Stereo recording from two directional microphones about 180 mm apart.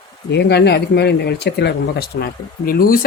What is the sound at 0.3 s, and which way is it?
Speech, 70° left (ahead or behind).